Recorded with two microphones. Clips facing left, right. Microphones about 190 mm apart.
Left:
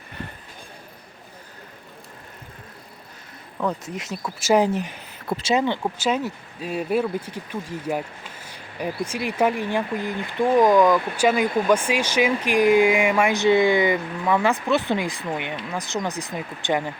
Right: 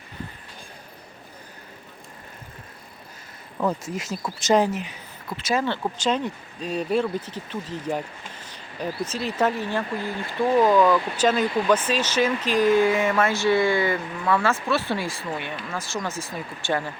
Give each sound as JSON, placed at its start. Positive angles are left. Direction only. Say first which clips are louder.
{"t": 3.9, "sound": "speech", "louder": "right 1 dB", "side_deg": 0}
{"t": 5.4, "sound": "speech", "louder": "left 2 dB", "side_deg": 20}